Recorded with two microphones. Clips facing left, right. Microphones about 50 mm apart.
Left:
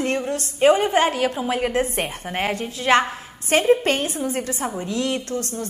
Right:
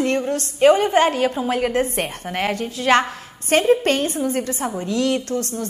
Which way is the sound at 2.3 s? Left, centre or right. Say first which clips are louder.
Right 2 dB; left.